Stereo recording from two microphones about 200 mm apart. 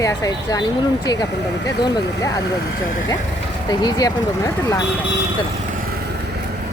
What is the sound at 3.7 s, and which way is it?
Speech, 20° left (ahead or behind).